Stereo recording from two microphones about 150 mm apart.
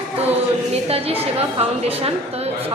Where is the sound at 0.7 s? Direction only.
40° right (ahead or behind).